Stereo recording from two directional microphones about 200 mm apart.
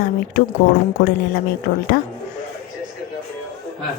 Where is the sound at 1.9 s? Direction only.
45° left (ahead or behind).